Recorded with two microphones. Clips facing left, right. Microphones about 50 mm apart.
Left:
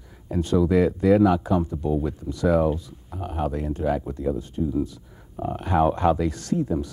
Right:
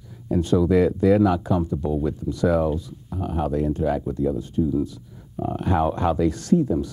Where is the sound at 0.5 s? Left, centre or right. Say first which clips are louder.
Right 1 dB; centre.